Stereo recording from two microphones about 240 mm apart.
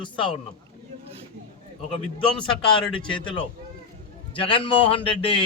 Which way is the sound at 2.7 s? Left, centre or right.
Left.